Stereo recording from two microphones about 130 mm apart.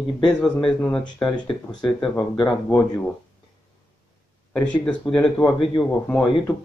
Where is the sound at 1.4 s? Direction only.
35° left (ahead or behind).